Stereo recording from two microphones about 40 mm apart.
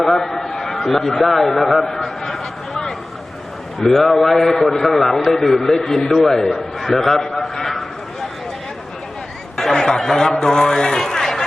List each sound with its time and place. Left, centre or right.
0.0 s a man's voice: centre
9.6 s a sound: centre
10.4 s speech: centre